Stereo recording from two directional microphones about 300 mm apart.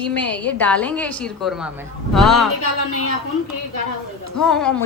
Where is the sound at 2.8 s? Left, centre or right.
Left.